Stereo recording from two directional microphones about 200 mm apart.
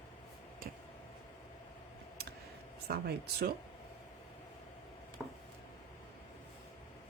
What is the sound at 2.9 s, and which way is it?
Speech, 50° right (ahead or behind).